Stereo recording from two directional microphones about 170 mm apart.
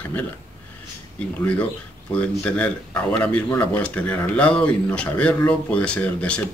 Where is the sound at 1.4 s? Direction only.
10° left (ahead or behind).